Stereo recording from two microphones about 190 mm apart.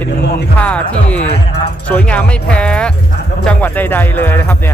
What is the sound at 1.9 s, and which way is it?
Speech, 5° left (ahead or behind).